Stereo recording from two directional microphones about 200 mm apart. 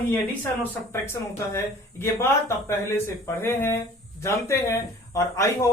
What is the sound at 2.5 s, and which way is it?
Speech, 15° left (ahead or behind).